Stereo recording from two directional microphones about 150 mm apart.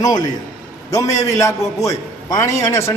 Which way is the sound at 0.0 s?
25° left (ahead or behind).